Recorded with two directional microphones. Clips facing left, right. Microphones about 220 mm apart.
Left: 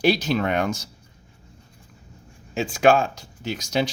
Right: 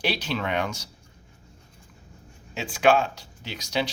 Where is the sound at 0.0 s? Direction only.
45° left (ahead or behind).